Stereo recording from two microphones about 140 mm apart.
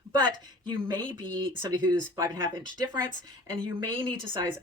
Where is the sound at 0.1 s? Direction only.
30° right (ahead or behind).